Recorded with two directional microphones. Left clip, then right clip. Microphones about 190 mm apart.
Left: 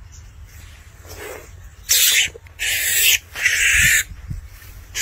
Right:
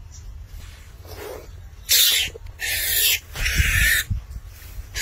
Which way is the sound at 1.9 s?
10° right (ahead or behind).